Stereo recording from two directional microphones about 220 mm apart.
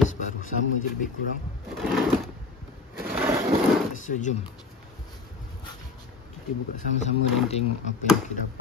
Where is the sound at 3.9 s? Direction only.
35° left (ahead or behind).